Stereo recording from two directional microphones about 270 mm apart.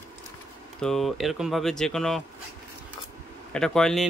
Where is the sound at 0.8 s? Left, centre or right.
Centre.